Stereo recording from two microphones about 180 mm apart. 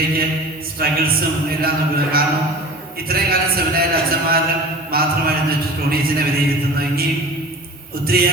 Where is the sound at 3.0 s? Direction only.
55° right (ahead or behind).